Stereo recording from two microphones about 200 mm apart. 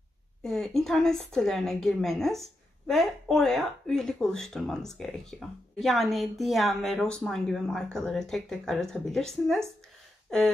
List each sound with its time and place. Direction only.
0.4 s a woman's voice: centre (ahead or behind)